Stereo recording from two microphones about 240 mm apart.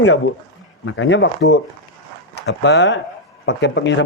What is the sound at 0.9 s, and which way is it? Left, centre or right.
Speech, left.